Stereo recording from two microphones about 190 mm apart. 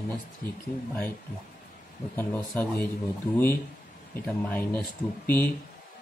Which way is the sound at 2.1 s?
10° left (ahead or behind).